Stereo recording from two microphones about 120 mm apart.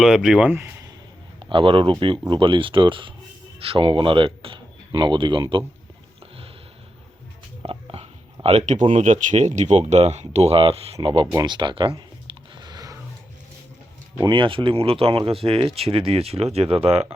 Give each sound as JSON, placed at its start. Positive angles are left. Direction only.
{"t": 0.0, "sound": "speech", "side_deg": -5}
{"t": 1.4, "sound": "speech", "side_deg": -45}
{"t": 7.7, "sound": "a sound", "side_deg": -50}
{"t": 8.9, "sound": "speech", "side_deg": -90}
{"t": 11.3, "sound": "a sound", "side_deg": -40}
{"t": 14.2, "sound": "speech", "side_deg": -45}